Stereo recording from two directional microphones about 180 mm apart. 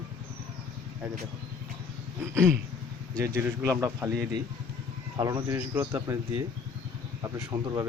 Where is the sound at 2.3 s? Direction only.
15° right (ahead or behind).